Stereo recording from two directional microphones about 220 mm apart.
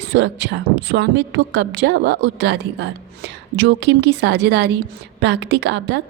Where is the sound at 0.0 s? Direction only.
55° right (ahead or behind).